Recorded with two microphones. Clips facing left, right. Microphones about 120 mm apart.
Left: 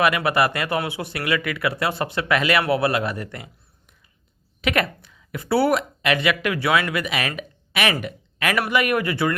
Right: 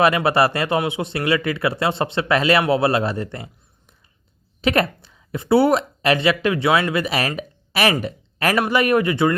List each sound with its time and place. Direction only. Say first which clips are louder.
0.0 s speech: right 3 dB; 30° right (ahead or behind)
4.6 s speech: right 4 dB; 30° right (ahead or behind)
8.0 s a sound: right 3 dB; 35° right (ahead or behind)
8.5 s speech: right 4 dB; 25° right (ahead or behind)